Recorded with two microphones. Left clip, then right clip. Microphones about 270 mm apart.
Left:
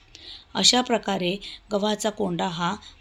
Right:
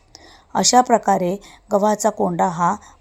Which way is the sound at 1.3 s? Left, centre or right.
Right.